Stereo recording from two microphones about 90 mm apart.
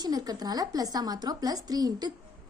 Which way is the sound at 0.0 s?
45° right (ahead or behind).